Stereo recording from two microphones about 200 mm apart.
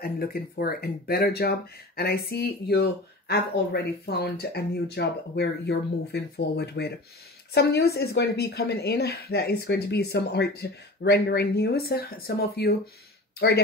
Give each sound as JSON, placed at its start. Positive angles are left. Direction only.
{"t": 0.0, "sound": "speech", "side_deg": 50}